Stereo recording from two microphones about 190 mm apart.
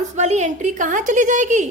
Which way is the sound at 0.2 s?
40° right (ahead or behind).